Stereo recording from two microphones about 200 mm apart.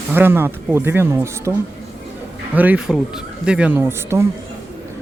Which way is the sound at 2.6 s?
5° right (ahead or behind).